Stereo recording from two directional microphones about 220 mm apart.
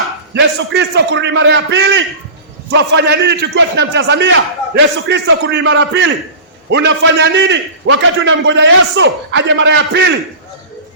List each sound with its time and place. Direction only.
0.3 s a man's voice: 50° right (ahead or behind)